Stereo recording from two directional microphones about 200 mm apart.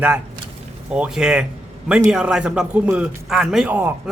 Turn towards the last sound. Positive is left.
turn(degrees=-10)  # may be behind; listen again after turning